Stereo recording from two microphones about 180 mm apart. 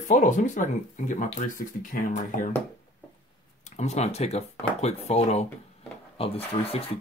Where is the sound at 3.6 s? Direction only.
40° left (ahead or behind).